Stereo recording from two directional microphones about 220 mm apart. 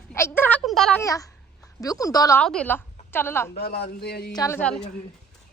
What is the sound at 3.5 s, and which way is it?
Speech, 45° left (ahead or behind).